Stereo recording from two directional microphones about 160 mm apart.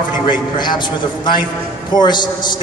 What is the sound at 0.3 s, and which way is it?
A man's voice, 30° left (ahead or behind).